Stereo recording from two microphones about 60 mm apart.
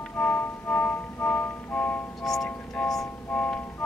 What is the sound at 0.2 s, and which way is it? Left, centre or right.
Music, left.